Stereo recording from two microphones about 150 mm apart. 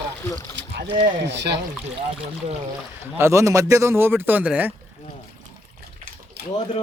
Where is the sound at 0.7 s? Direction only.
75° right (ahead or behind).